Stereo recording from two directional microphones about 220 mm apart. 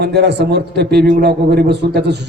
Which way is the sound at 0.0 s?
50° right (ahead or behind).